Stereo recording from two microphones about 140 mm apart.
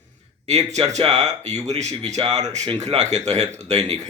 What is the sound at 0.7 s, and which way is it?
Speech, 50° right (ahead or behind).